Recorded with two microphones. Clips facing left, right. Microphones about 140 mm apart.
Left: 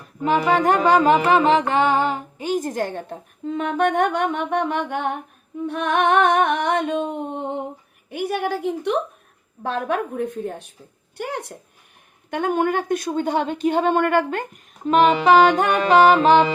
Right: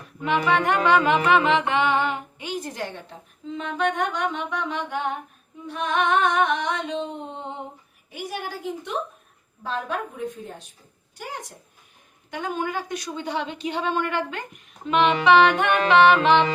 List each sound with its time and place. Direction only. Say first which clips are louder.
0.2 s music: left 4 dB; 35° left (ahead or behind); by 5.1 s 55° left (ahead or behind)
5.6 s a sound: left 4 dB; 60° left (ahead or behind)
12.3 s music: left 7 dB; 55° left (ahead or behind); by 16.5 s 35° left (ahead or behind)